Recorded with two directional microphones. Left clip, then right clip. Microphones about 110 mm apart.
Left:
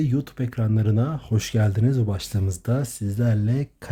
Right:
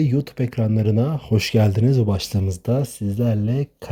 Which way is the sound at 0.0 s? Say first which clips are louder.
Right 4 dB; 45° right (ahead or behind).